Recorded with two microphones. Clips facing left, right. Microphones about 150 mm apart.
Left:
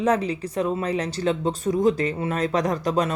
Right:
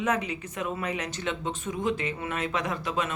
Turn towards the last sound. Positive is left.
turn(degrees=40)  # may be behind; listen again after turning